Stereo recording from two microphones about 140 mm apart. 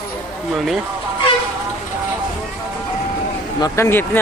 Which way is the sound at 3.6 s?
20° left (ahead or behind).